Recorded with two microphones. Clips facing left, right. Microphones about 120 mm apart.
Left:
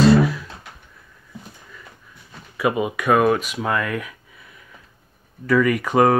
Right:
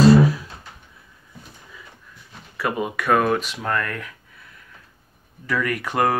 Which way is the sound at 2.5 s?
10° left (ahead or behind).